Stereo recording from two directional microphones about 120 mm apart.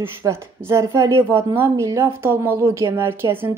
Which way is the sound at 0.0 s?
25° right (ahead or behind).